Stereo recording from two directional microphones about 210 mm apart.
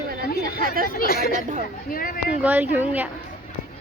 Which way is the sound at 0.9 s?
45° left (ahead or behind).